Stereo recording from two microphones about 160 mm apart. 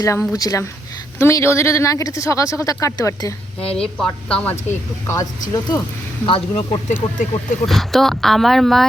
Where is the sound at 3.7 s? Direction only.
5° left (ahead or behind).